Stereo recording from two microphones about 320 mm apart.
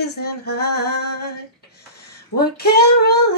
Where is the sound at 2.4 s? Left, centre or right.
Left.